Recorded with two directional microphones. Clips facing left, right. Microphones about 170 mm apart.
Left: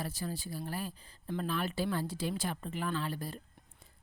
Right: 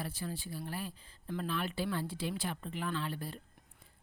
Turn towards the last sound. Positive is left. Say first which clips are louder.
# left 2 dB
turn(degrees=40)  # may be behind; listen again after turning